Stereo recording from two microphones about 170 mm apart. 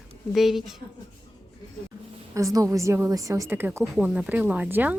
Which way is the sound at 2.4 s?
20° right (ahead or behind).